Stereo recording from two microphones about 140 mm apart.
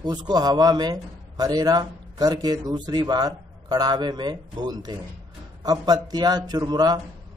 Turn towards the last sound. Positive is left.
turn(degrees=-30)  # may be behind; listen again after turning